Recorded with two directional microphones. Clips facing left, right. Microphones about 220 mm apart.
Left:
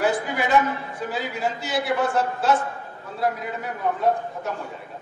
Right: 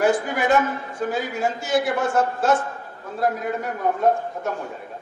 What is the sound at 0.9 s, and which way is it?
A man's voice, 45° right (ahead or behind).